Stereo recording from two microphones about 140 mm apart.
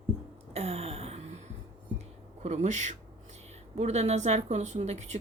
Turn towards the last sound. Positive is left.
turn(degrees=-55)  # may be behind; listen again after turning